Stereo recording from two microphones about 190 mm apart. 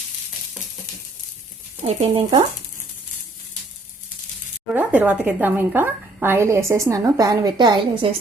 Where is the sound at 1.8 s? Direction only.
30° right (ahead or behind).